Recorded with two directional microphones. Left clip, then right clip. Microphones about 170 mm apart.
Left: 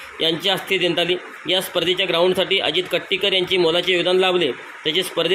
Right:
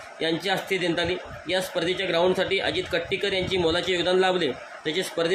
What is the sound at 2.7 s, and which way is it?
Speech, 30° right (ahead or behind).